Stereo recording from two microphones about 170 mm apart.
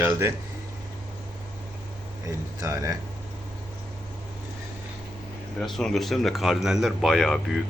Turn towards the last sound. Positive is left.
turn(degrees=0)  # may be behind; listen again after turning